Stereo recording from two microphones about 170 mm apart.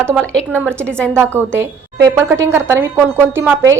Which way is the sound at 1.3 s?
15° right (ahead or behind).